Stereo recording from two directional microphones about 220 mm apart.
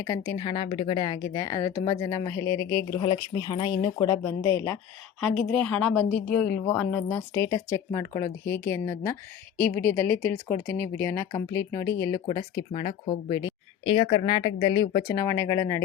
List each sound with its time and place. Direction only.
0.1 s a woman's voice: 15° left (ahead or behind)